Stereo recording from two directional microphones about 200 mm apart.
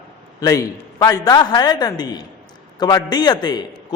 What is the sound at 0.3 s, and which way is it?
A man's voice, 15° left (ahead or behind).